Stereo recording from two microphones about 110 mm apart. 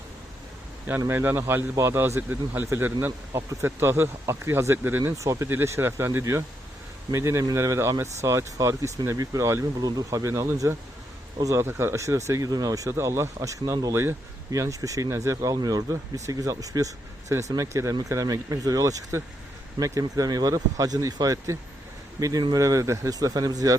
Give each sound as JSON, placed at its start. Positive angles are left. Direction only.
{"t": 0.9, "sound": "speech", "side_deg": -20}